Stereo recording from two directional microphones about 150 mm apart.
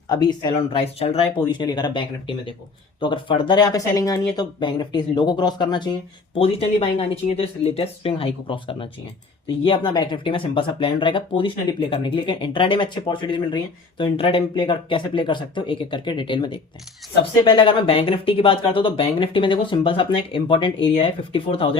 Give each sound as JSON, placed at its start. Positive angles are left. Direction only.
{"t": 0.1, "sound": "speech", "side_deg": 30}